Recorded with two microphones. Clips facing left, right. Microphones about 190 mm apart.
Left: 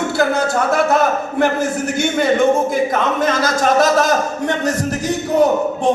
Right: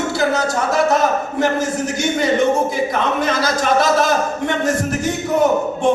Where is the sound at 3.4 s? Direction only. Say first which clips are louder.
Left 3 dB; 45° left (ahead or behind).